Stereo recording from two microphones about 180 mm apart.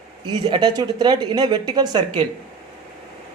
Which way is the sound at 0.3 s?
25° right (ahead or behind).